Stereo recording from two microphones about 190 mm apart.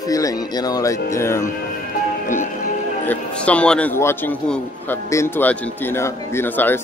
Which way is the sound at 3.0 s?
5° left (ahead or behind).